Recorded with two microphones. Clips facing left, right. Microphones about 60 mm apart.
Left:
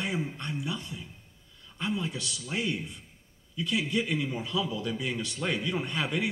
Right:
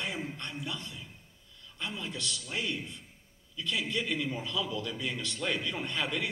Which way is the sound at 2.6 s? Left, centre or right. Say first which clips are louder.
Left 4 dB; left.